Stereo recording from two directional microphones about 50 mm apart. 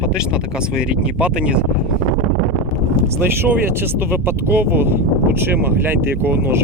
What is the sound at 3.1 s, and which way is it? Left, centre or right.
Speech, right.